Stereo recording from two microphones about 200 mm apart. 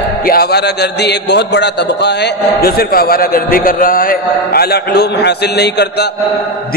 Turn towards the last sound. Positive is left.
turn(degrees=55)  # may be behind; listen again after turning